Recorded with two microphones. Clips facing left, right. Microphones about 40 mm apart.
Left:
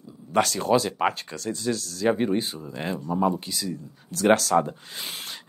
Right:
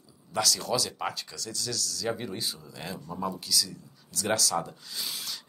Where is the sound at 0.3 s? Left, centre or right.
Left.